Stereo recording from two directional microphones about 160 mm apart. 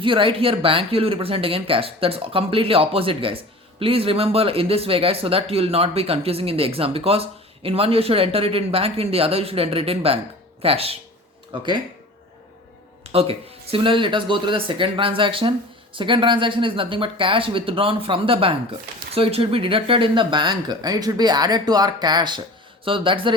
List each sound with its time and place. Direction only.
0.0 s speech: 35° right (ahead or behind)
13.1 s speech: 40° right (ahead or behind)